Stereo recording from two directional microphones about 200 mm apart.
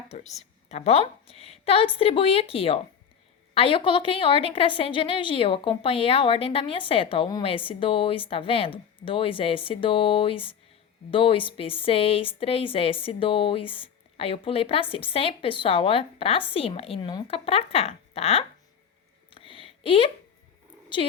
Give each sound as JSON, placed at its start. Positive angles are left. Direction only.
{"t": 0.1, "sound": "a woman's voice", "side_deg": 35}
{"t": 19.3, "sound": "a sound", "side_deg": 25}
{"t": 20.9, "sound": "a woman's voice", "side_deg": 25}